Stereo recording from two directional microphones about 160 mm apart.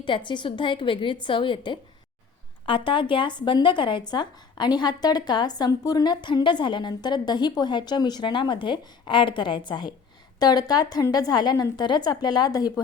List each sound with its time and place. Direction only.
0.3 s a woman's voice: 30° left (ahead or behind)